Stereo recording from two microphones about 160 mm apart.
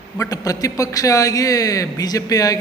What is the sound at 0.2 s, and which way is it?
A man's voice, 20° left (ahead or behind).